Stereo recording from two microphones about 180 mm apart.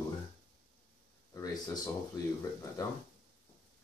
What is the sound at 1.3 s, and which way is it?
Speech, 20° left (ahead or behind).